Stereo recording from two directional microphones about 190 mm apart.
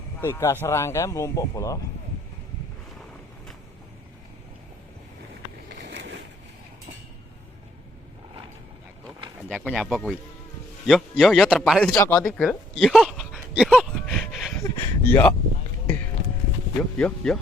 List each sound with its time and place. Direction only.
0.2 s speech: 15° left (ahead or behind)
5.8 s a sound: 70° right (ahead or behind)
9.6 s a man's voice: centre (ahead or behind)
11.9 s speech: 10° left (ahead or behind)
14.6 s speech: 15° left (ahead or behind)
17.0 s a man's voice: 5° left (ahead or behind)